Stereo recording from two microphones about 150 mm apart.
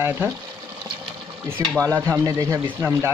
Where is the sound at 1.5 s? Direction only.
20° right (ahead or behind).